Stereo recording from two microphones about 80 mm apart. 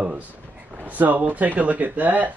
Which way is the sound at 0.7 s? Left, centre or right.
Right.